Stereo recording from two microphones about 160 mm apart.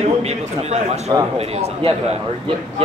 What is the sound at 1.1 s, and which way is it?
Speech, 25° right (ahead or behind).